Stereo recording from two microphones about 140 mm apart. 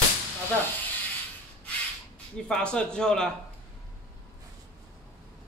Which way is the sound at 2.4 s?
5° left (ahead or behind).